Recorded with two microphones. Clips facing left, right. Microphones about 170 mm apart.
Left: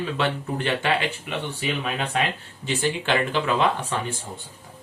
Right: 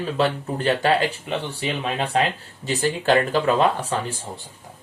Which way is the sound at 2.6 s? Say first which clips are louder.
Right 4 dB; 40° right (ahead or behind).